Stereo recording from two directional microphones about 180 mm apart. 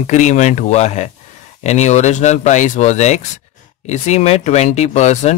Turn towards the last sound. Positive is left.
turn(degrees=40)  # may be behind; listen again after turning